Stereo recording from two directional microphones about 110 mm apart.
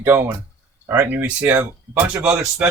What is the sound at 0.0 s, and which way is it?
Speech, 20° right (ahead or behind).